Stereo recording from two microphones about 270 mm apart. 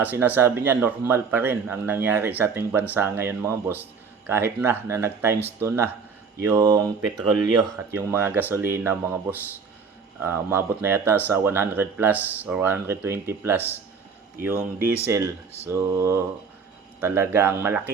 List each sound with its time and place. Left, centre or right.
0.0 s speech: centre